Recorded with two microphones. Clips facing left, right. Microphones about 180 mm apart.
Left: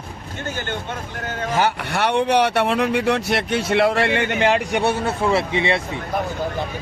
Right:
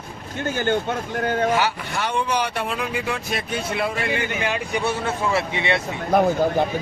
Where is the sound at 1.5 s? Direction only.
60° left (ahead or behind).